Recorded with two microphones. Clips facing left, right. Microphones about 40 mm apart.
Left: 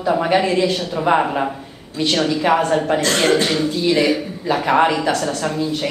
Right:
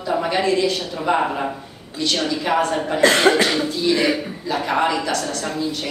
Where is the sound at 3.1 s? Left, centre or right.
Centre.